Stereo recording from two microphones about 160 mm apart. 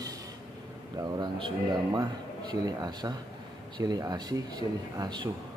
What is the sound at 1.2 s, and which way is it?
A man's voice, 30° right (ahead or behind).